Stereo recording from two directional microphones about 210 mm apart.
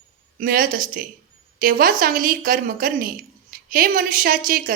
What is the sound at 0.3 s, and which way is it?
A woman's voice, 40° right (ahead or behind).